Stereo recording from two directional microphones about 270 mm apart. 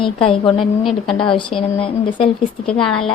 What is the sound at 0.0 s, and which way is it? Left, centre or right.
Speech, centre.